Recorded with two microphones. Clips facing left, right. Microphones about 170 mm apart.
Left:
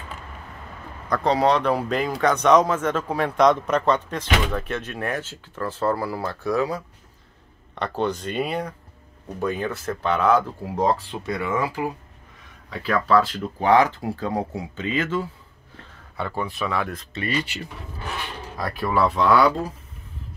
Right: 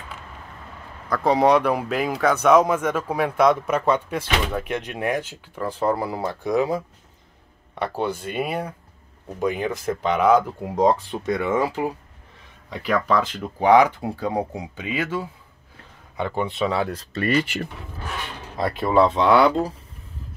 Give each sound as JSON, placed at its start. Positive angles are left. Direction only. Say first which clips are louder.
{"t": 1.0, "sound": "a man's voice", "louder": "right 2 dB", "side_deg": -5}
{"t": 17.1, "sound": "speech", "louder": "right 7 dB", "side_deg": -45}
{"t": 18.6, "sound": "speech", "louder": "right 4 dB", "side_deg": -25}